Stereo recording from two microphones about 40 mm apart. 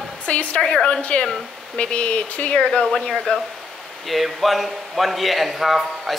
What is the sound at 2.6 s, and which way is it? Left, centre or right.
Speech, left.